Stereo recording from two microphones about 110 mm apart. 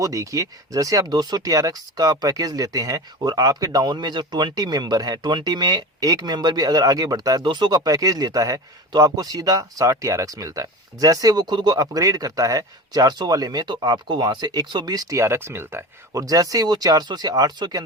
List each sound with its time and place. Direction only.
0.0 s speech: 30° right (ahead or behind)
15.2 s speech: 25° right (ahead or behind)
16.2 s speech: 35° right (ahead or behind)